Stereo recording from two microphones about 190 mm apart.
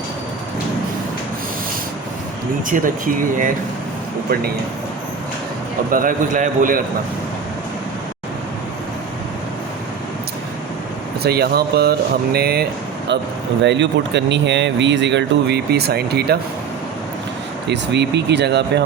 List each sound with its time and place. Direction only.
2.6 s a man's voice: 45° right (ahead or behind)
5.9 s a man's voice: 45° right (ahead or behind)
11.2 s speech: 55° right (ahead or behind)
13.6 s speech: 70° right (ahead or behind)
17.7 s speech: 65° right (ahead or behind)